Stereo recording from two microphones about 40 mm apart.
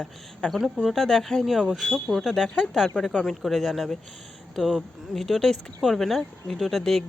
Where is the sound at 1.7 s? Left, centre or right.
Centre.